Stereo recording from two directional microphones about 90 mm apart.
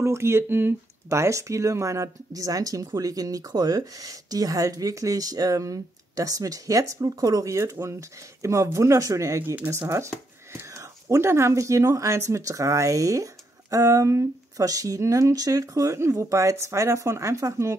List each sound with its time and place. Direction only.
0.0 s speech: 30° right (ahead or behind)